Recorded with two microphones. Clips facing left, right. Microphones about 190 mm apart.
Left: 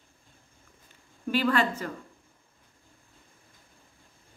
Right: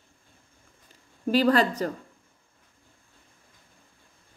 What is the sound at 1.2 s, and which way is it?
Speech, 40° right (ahead or behind).